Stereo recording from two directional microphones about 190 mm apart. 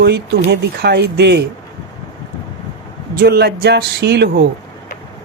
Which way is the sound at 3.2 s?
55° right (ahead or behind).